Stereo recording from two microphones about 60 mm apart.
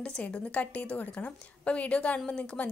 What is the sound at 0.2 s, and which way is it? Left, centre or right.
A woman's voice, left.